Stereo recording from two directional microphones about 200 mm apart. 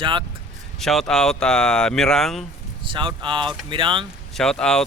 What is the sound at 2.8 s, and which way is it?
Speech, 25° right (ahead or behind).